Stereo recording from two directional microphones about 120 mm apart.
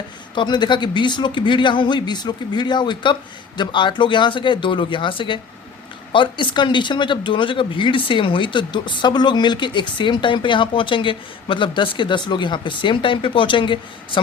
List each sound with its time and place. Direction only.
0.3 s speech: 40° left (ahead or behind)